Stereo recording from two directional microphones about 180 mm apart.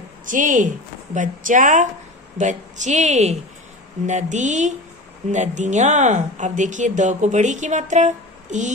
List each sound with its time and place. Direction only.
0.3 s a woman's voice: 45° right (ahead or behind)